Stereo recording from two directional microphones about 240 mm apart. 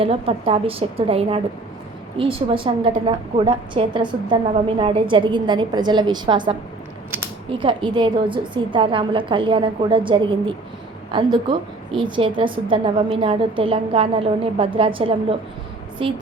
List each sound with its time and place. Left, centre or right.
0.0 s a woman's voice: right
7.6 s a woman's voice: right